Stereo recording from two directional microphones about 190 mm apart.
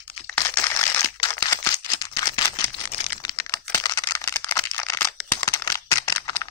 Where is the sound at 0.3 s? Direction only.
10° left (ahead or behind).